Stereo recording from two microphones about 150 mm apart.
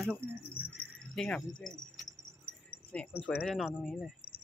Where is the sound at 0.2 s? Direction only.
90° left.